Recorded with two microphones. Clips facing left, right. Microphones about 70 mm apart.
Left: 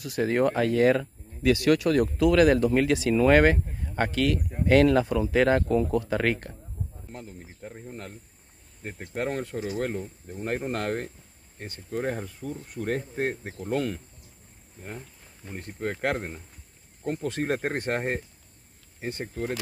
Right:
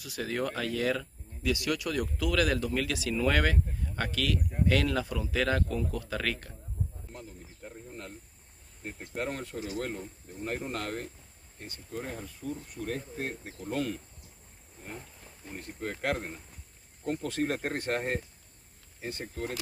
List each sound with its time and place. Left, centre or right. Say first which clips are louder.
0.0 s speech: left 9 dB; left
2.1 s speech: left 9 dB; left
7.1 s speech: left 4 dB; left
8.8 s speech: left 3 dB; left
9.1 s speech: left 5 dB; left
11.5 s speech: left 7 dB; left
15.5 s speech: left 5 dB; left